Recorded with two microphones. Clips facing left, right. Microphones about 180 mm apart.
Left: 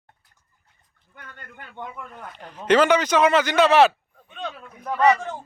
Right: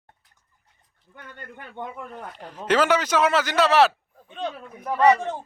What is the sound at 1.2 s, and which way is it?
Speech, 30° right (ahead or behind).